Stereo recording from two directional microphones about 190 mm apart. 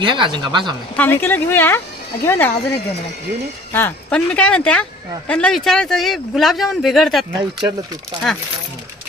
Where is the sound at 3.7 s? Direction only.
10° left (ahead or behind).